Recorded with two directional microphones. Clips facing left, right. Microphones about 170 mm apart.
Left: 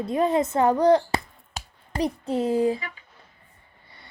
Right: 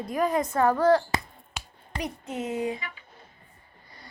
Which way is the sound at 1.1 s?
35° left (ahead or behind).